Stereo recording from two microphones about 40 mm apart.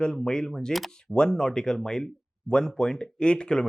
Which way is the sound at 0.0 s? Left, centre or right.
Centre.